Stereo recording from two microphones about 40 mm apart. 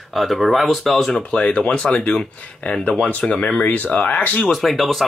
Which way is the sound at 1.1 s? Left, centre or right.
Left.